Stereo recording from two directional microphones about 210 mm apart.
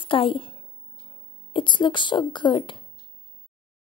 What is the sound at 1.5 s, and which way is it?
Speech, 25° left (ahead or behind).